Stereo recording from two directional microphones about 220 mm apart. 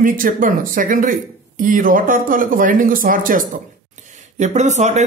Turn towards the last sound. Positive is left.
turn(degrees=-30)  # may be behind; listen again after turning